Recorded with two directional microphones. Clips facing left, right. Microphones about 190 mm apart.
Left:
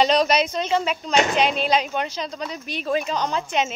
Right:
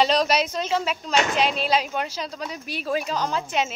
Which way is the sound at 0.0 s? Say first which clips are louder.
Left 2 dB; centre (ahead or behind).